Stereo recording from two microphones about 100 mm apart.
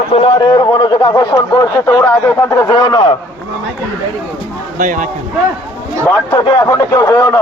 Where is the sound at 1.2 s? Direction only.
40° left (ahead or behind).